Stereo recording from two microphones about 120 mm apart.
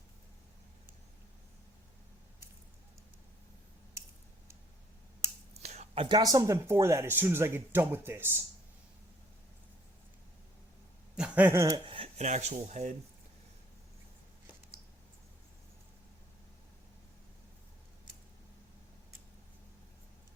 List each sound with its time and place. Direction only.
5.6 s a sound: 65° right (ahead or behind)
6.1 s speech: 30° right (ahead or behind)
11.2 s speech: 15° right (ahead or behind)
11.9 s speech: 55° right (ahead or behind); by 12.9 s 85° right